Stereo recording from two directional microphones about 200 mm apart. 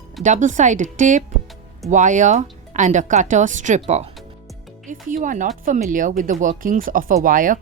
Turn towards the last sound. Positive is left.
turn(degrees=-45)  # may be behind; listen again after turning